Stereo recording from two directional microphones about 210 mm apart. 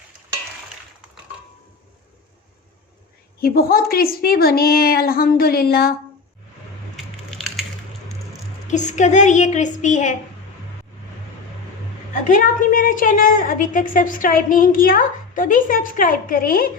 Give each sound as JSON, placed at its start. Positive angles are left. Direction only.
{"t": 3.4, "sound": "a woman's voice", "side_deg": 45}
{"t": 6.9, "sound": "a sound", "side_deg": 0}
{"t": 8.6, "sound": "a woman's voice", "side_deg": 35}
{"t": 12.3, "sound": "a woman's voice", "side_deg": 40}